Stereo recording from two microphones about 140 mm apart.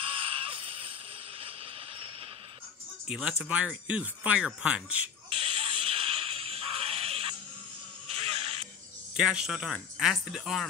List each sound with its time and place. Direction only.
0.0 s music: 40° right (ahead or behind)
3.1 s speech: 5° right (ahead or behind)
5.3 s music: 40° right (ahead or behind)
9.1 s a man's voice: 5° right (ahead or behind)